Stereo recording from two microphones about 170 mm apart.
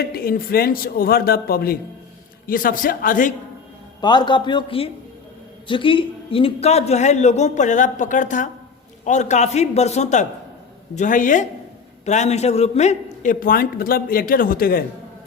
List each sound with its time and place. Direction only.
0.0 s a man's voice: 60° left (ahead or behind)
4.0 s a man's voice: 25° left (ahead or behind); by 14.8 s 60° left (ahead or behind)